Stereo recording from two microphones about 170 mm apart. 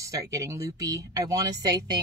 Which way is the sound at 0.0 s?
20° right (ahead or behind).